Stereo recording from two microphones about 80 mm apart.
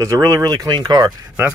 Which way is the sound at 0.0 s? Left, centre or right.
Right.